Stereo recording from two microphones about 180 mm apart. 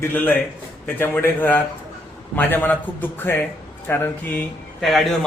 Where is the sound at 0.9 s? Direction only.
10° left (ahead or behind).